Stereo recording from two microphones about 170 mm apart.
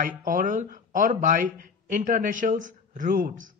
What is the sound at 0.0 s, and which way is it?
Speech, 55° right (ahead or behind).